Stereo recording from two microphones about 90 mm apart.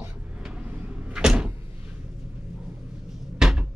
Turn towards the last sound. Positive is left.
turn(degrees=-10)  # may be behind; listen again after turning